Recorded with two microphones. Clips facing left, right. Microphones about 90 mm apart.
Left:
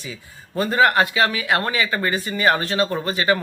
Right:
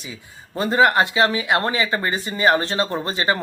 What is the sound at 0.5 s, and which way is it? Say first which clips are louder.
Speech: even; 25° right (ahead or behind).